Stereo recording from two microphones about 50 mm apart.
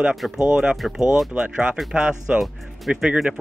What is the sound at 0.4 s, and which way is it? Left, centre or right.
Speech, centre.